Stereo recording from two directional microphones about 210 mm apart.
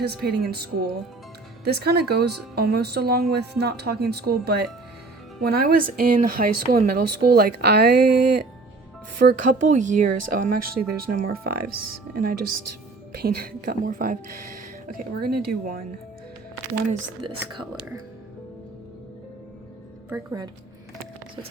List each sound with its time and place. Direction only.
0.0 s speech: 50° right (ahead or behind)
20.1 s a woman's voice: 15° right (ahead or behind)